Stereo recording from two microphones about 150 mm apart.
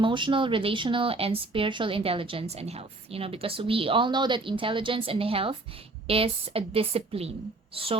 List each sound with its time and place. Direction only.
0.0 s speech: 35° right (ahead or behind)